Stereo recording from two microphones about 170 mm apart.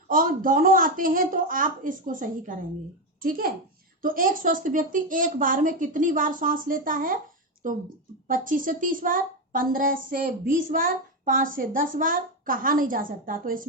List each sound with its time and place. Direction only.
0.1 s a woman's voice: 55° right (ahead or behind)